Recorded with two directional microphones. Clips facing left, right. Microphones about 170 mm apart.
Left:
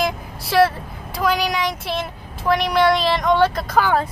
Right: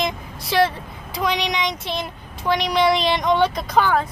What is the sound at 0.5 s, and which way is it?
Vehicle, 5° left (ahead or behind).